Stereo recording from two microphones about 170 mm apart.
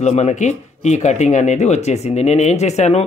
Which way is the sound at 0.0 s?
45° left (ahead or behind).